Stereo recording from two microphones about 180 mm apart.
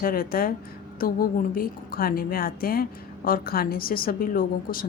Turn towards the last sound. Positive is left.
turn(degrees=55)  # may be behind; listen again after turning